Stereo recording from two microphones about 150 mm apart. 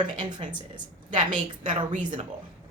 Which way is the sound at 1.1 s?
55° right (ahead or behind).